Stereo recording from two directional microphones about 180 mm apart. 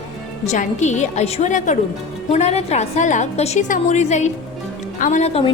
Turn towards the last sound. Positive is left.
turn(degrees=35)  # may be behind; listen again after turning